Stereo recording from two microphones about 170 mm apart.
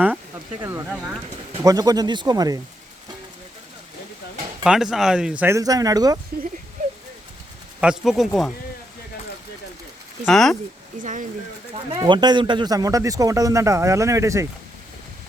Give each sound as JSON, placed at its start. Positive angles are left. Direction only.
{"t": 0.6, "sound": "speech", "side_deg": -15}
{"t": 4.6, "sound": "speech", "side_deg": -5}
{"t": 7.8, "sound": "speech", "side_deg": -5}
{"t": 10.2, "sound": "speech", "side_deg": 5}
{"t": 11.0, "sound": "speech", "side_deg": -50}
{"t": 11.7, "sound": "speech", "side_deg": -25}